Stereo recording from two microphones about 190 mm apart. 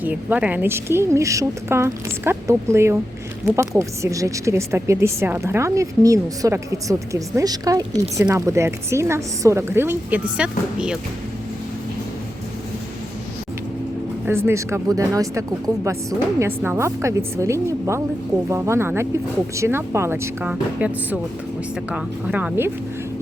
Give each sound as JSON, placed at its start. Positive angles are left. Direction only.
{"t": 0.0, "sound": "a woman's voice", "side_deg": -10}
{"t": 14.3, "sound": "a woman's voice", "side_deg": -10}